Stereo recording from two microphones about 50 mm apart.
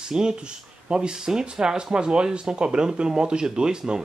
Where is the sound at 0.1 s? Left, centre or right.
Centre.